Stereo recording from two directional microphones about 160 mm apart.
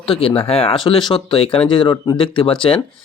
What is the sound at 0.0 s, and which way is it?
A man's voice, 35° left (ahead or behind).